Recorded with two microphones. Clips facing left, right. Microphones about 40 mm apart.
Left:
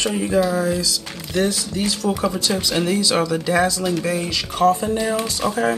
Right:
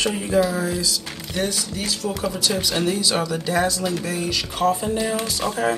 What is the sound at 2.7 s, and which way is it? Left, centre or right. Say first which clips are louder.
Speech: left 4 dB; centre.